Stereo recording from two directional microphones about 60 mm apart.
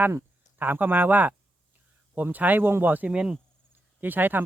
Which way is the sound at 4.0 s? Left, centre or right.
Right.